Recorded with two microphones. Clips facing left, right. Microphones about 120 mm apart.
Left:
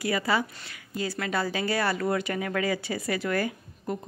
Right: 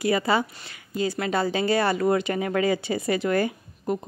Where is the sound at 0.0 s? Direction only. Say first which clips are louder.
Right 4 dB; 25° right (ahead or behind).